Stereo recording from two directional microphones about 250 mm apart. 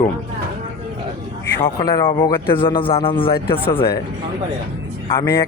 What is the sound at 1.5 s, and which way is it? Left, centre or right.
Speech, centre.